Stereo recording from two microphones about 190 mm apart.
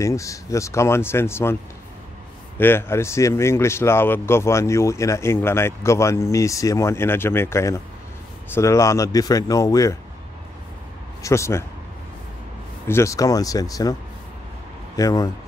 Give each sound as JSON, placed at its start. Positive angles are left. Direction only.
{"t": 0.0, "sound": "speech", "side_deg": 15}
{"t": 11.2, "sound": "speech", "side_deg": 15}
{"t": 12.8, "sound": "speech", "side_deg": 15}
{"t": 15.0, "sound": "speech", "side_deg": 20}